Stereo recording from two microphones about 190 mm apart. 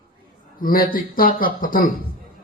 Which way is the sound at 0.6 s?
50° left (ahead or behind).